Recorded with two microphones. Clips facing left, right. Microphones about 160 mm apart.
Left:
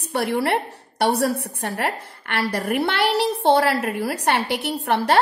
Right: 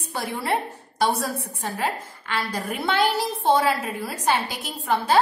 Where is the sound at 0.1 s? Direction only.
70° left (ahead or behind).